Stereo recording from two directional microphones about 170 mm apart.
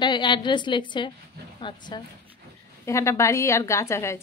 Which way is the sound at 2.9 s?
15° left (ahead or behind).